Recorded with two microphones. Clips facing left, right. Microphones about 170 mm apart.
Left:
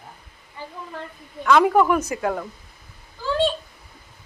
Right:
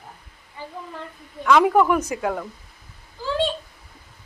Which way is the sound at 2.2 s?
Centre (ahead or behind).